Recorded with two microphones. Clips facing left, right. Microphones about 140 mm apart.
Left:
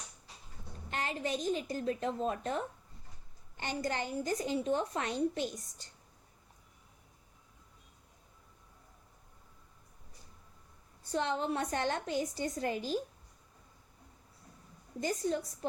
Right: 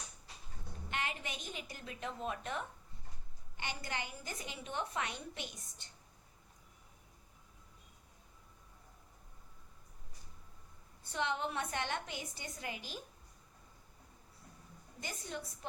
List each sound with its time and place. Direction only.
0.9 s a woman's voice: 35° left (ahead or behind)
11.1 s a woman's voice: 35° left (ahead or behind)
15.0 s a woman's voice: 40° left (ahead or behind)